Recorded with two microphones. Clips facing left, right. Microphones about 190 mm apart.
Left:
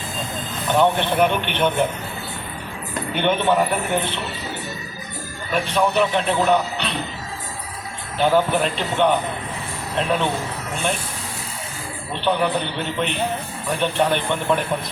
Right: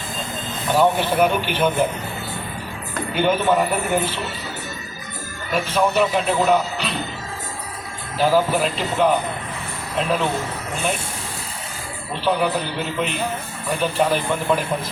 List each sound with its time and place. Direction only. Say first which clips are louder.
0.7 s speech: even; 5° right (ahead or behind)
3.2 s speech: right 1 dB; 5° right (ahead or behind)
5.5 s speech: even; centre (ahead or behind)
8.2 s speech: even; 5° right (ahead or behind)
12.2 s speech: even; 5° right (ahead or behind)